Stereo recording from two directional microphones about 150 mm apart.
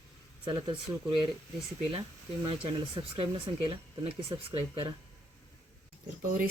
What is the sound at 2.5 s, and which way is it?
Speech, 35° right (ahead or behind).